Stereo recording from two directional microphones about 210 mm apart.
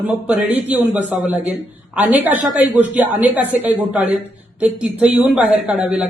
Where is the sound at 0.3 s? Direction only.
5° right (ahead or behind).